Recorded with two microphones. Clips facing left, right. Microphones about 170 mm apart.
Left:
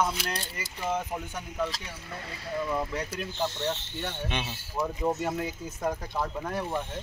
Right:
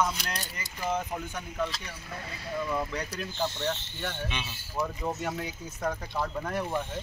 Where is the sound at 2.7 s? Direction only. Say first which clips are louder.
Left 1 dB; 5° left (ahead or behind).